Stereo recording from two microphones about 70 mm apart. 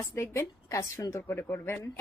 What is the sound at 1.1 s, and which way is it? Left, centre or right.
Speech, left.